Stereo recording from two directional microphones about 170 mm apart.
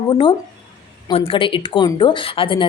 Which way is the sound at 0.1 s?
30° left (ahead or behind).